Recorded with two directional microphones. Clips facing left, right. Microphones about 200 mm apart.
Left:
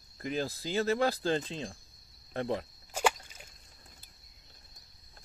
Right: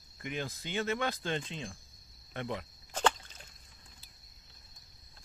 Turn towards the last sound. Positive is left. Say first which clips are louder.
# left 1 dB
turn(degrees=10)  # may be behind; listen again after turning